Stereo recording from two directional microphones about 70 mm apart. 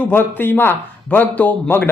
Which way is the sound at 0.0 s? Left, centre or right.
Left.